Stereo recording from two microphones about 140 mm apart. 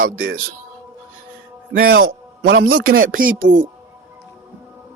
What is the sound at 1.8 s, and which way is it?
A man's voice, 90° right.